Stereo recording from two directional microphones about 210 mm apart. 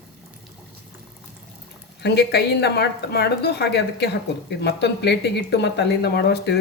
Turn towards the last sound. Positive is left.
turn(degrees=50)  # may be behind; listen again after turning